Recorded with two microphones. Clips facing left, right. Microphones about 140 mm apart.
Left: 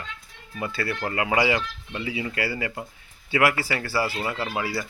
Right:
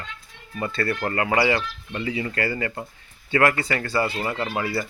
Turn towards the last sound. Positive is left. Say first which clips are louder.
# right 2 dB
turn(degrees=5)  # may be behind; listen again after turning